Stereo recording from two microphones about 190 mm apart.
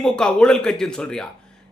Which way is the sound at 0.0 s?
5° left (ahead or behind).